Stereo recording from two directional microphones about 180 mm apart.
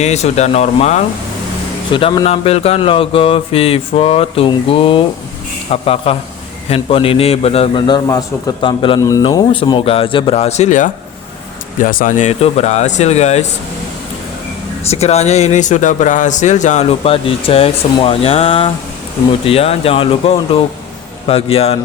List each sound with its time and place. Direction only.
0.0 s speech: 40° left (ahead or behind)
1.9 s a man's voice: 30° left (ahead or behind)
14.8 s speech: 35° left (ahead or behind)